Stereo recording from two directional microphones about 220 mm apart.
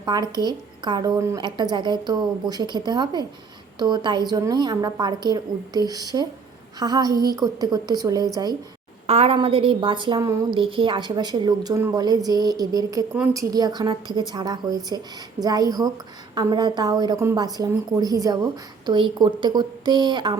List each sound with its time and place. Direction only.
0.0 s a woman's voice: 20° right (ahead or behind)
9.0 s a woman's voice: 30° right (ahead or behind)